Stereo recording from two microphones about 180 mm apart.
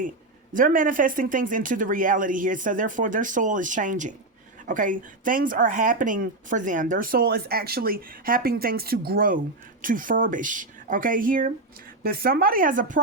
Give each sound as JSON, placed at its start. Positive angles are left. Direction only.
{"t": 0.5, "sound": "speech", "side_deg": -50}